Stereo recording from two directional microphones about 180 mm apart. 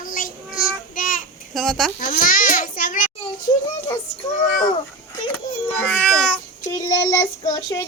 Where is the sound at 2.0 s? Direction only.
50° left (ahead or behind).